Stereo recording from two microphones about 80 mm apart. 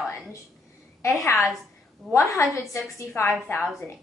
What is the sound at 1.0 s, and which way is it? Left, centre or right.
A woman's voice, left.